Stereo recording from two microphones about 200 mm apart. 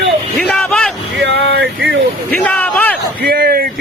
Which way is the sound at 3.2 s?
45° right (ahead or behind).